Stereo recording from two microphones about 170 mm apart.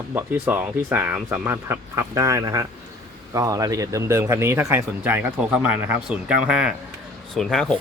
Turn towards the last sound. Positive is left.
turn(degrees=5)  # may be behind; listen again after turning